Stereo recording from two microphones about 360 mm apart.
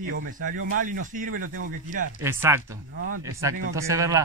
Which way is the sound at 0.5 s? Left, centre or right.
Right.